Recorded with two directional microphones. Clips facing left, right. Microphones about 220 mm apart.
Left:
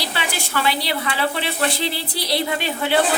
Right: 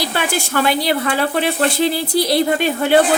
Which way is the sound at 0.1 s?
50° right (ahead or behind).